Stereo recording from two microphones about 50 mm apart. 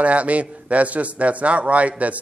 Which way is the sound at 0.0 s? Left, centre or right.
Right.